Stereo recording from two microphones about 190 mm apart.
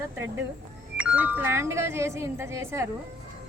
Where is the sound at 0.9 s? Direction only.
5° right (ahead or behind).